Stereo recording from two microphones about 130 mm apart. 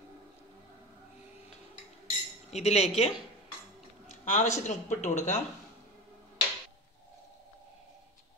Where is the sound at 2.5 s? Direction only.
55° left (ahead or behind).